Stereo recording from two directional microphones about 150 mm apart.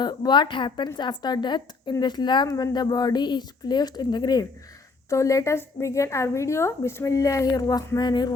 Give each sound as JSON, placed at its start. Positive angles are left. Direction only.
{"t": 0.0, "sound": "a woman's voice", "side_deg": 30}